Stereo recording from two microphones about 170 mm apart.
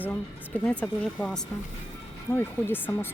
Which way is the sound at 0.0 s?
10° left (ahead or behind).